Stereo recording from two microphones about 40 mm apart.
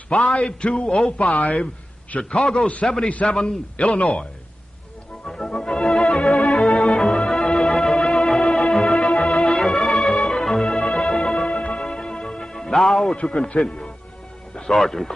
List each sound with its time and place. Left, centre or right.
0.1 s a man's voice: left
1.1 s speech: left
2.1 s a man's voice: centre
5.2 s music: centre
5.9 s organ: centre
6.9 s music: centre
13.1 s a man's voice: left
14.7 s speech: centre